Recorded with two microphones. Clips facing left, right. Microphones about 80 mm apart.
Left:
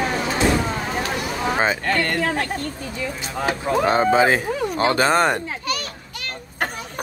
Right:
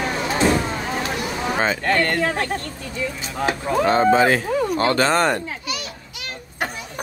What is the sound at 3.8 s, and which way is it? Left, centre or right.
Speech, centre.